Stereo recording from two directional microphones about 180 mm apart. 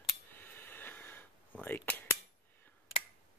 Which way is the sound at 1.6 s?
10° left (ahead or behind).